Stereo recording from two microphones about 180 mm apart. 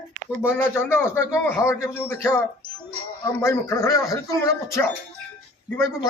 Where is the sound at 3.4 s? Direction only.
15° left (ahead or behind).